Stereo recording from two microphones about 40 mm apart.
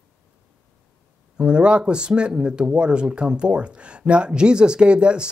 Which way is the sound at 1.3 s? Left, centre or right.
Right.